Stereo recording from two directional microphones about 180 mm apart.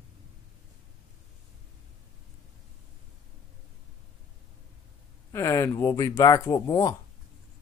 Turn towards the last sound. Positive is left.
turn(degrees=20)  # may be behind; listen again after turning